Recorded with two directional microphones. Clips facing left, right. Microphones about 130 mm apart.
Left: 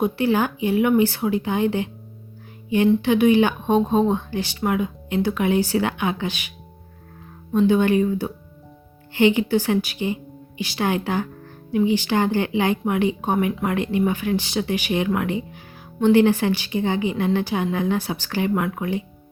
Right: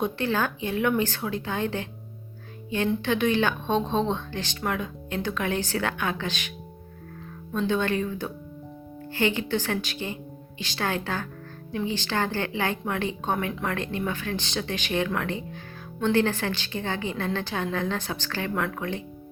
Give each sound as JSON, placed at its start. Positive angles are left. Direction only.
{"t": 0.0, "sound": "speech", "side_deg": 10}
{"t": 2.6, "sound": "music", "side_deg": 15}
{"t": 3.0, "sound": "speech", "side_deg": 10}
{"t": 7.7, "sound": "speech", "side_deg": 15}